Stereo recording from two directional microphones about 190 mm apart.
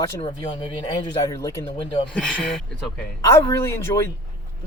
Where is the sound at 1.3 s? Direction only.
15° left (ahead or behind).